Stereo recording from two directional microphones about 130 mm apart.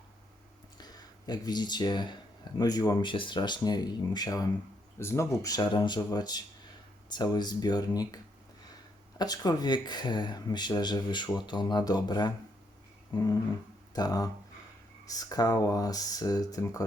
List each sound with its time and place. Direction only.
0.8 s speech: 30° left (ahead or behind)
13.9 s speech: 30° left (ahead or behind)